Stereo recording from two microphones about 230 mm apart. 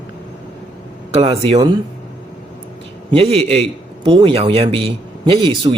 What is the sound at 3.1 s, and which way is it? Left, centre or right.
Speech, right.